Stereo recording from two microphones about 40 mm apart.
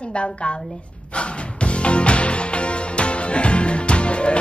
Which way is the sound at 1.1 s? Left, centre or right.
Left.